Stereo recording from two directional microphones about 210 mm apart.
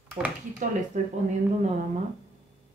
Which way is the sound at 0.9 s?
35° right (ahead or behind).